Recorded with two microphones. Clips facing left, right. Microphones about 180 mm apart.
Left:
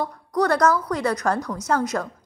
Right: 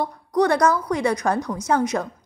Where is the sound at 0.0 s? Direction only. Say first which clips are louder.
Right 2 dB; 20° right (ahead or behind).